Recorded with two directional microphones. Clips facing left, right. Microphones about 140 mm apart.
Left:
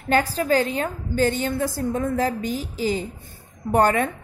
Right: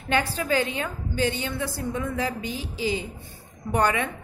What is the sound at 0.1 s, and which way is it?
A woman's voice, 40° left (ahead or behind).